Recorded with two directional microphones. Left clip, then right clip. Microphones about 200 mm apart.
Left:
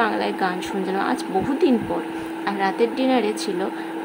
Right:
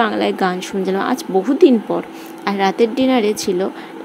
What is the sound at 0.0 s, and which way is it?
A woman's voice, 30° right (ahead or behind).